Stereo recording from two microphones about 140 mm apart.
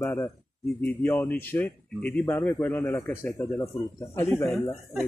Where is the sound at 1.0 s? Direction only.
15° left (ahead or behind).